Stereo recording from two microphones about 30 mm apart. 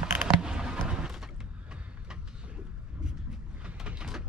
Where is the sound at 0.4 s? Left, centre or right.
Right.